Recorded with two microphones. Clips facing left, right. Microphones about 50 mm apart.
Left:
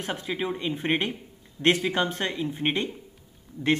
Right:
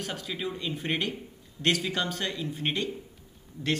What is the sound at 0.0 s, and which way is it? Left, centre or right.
A man's voice, left.